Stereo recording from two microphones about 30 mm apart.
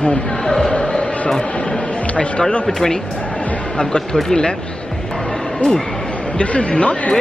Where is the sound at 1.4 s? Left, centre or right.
Left.